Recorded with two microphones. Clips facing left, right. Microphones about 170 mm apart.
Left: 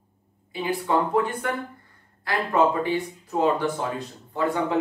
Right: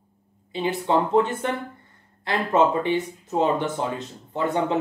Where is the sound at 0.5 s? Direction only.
25° right (ahead or behind).